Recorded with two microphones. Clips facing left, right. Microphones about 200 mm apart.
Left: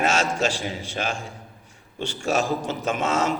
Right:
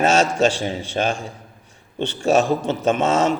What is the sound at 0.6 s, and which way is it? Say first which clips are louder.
A man's voice: right 6 dB; 30° right (ahead or behind).